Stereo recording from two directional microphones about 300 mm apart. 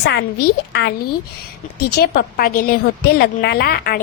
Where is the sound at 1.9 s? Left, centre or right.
Left.